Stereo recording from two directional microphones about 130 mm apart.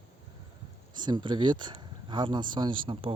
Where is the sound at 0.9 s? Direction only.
35° right (ahead or behind).